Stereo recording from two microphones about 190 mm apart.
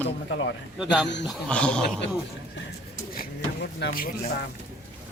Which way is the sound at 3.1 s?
60° left (ahead or behind).